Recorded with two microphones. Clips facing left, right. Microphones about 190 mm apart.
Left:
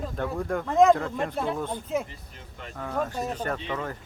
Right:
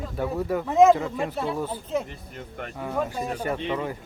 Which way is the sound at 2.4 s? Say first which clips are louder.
Right 8 dB; 55° right (ahead or behind).